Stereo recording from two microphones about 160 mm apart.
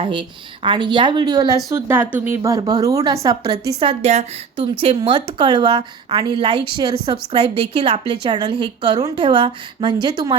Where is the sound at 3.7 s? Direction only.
40° right (ahead or behind).